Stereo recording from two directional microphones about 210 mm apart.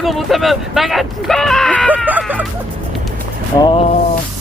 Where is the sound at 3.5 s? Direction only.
20° left (ahead or behind).